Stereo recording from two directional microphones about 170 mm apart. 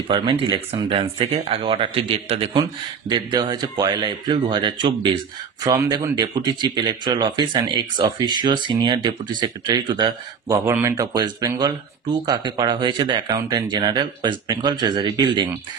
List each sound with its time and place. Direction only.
0.1 s speech: 30° right (ahead or behind)
2.6 s speech: 25° right (ahead or behind)
10.6 s speech: 15° right (ahead or behind)